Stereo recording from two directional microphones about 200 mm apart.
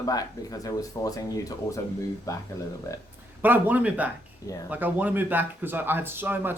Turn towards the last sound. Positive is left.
turn(degrees=-10)  # may be behind; listen again after turning